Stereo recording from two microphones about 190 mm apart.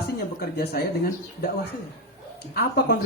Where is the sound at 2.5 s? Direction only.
55° left (ahead or behind).